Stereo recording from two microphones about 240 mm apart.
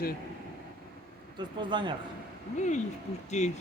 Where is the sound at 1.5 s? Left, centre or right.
Centre.